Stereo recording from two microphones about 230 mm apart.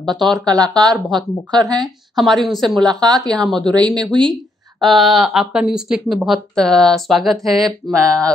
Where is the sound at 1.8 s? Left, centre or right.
Centre.